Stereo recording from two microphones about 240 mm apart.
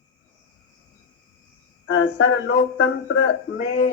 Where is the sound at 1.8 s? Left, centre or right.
Left.